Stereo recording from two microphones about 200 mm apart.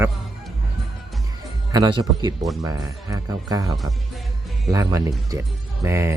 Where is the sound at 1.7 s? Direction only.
20° right (ahead or behind).